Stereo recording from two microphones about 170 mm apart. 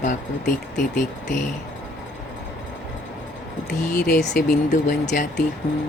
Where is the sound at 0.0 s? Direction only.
50° left (ahead or behind).